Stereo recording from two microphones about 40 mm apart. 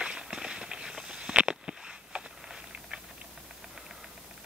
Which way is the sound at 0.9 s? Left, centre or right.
Centre.